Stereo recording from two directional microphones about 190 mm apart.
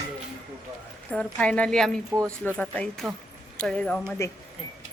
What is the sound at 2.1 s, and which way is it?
Speech, 15° right (ahead or behind).